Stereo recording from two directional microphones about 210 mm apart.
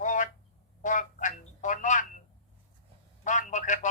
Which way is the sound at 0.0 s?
35° left (ahead or behind).